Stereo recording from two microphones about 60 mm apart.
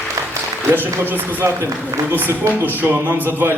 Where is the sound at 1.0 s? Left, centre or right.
Right.